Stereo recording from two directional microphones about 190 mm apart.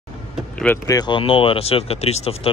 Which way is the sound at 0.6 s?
15° left (ahead or behind).